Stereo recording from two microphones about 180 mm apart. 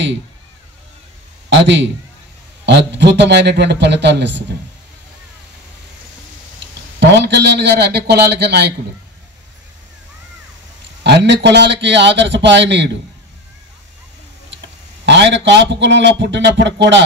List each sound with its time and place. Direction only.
1.5 s a man's voice: 80° right
7.2 s a man's voice: 70° right (ahead or behind)
11.1 s a man's voice: 75° right (ahead or behind)
15.0 s a man's voice: 75° right (ahead or behind)